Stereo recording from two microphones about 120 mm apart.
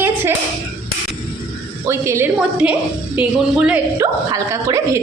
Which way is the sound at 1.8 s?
25° right (ahead or behind).